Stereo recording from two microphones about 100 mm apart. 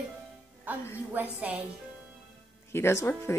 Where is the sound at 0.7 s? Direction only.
15° right (ahead or behind).